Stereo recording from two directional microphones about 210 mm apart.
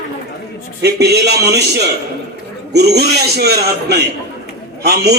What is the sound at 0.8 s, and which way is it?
A man's voice, 50° right (ahead or behind).